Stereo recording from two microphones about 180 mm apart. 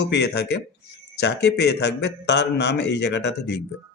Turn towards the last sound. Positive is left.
turn(degrees=70)  # may be behind; listen again after turning